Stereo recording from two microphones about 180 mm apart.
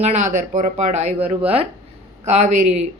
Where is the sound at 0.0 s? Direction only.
40° right (ahead or behind).